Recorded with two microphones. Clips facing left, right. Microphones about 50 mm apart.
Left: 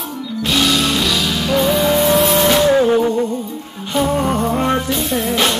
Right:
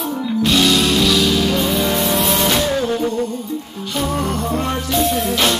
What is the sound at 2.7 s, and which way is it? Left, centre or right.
Music, left.